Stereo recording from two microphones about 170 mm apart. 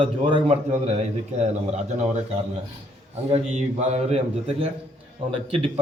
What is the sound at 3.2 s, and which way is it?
A man's voice, 40° right (ahead or behind).